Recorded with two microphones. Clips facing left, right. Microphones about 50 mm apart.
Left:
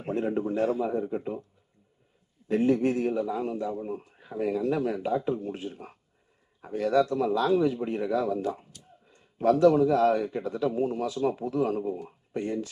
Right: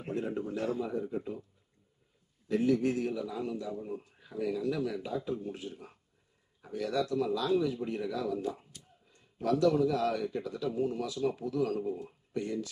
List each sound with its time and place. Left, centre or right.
0.1 s a man's voice: left
2.4 s a man's voice: left